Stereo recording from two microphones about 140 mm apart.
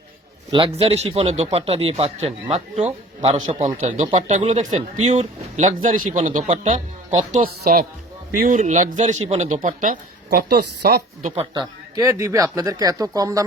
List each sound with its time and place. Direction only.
0.5 s speech: 40° right (ahead or behind)
3.3 s a man's voice: 35° right (ahead or behind)
3.8 s speech: 60° right (ahead or behind); by 7.9 s 90° right
8.4 s speech: 65° right (ahead or behind)
9.6 s speech: 70° right (ahead or behind)
10.8 s speech: 90° right
11.9 s speech: 25° right (ahead or behind)